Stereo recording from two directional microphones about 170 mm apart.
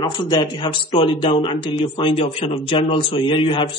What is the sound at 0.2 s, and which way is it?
Speech, 25° left (ahead or behind).